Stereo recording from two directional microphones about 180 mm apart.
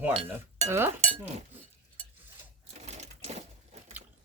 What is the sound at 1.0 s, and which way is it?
Speech, 40° right (ahead or behind).